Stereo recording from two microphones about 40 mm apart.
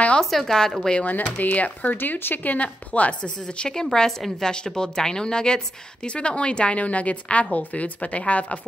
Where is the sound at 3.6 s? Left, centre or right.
Centre.